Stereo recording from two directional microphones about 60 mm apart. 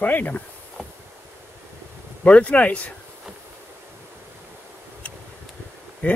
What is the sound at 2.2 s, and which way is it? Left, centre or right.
Speech, left.